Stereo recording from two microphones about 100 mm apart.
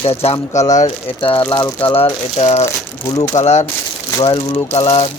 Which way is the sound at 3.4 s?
90° left.